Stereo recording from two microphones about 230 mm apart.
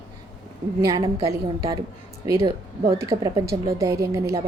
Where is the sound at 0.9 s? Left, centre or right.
Centre.